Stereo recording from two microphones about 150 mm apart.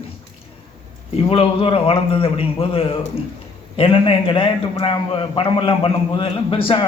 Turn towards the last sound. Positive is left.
turn(degrees=35)  # may be behind; listen again after turning